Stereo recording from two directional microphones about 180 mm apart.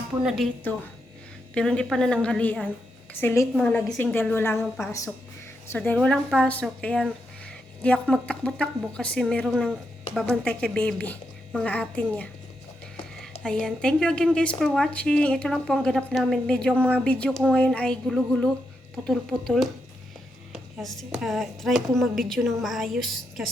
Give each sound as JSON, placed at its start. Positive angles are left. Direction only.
{"t": 1.5, "sound": "a woman's voice", "side_deg": 5}
{"t": 13.4, "sound": "a woman's voice", "side_deg": 5}